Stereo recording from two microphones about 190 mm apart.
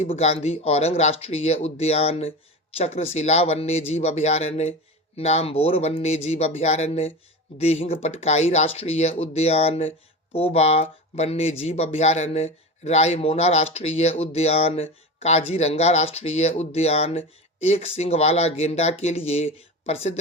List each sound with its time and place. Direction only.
0.0 s speech: 35° left (ahead or behind)